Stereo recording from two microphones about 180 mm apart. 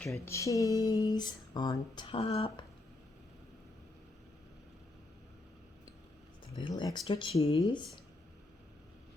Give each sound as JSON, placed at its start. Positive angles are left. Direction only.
{"t": 0.1, "sound": "speech", "side_deg": 15}
{"t": 6.6, "sound": "speech", "side_deg": 25}